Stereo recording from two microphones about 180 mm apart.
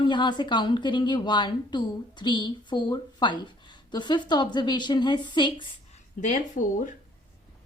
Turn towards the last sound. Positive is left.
turn(degrees=45)  # may be behind; listen again after turning